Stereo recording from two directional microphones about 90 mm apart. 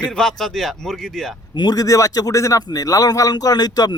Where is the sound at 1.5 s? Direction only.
50° left (ahead or behind).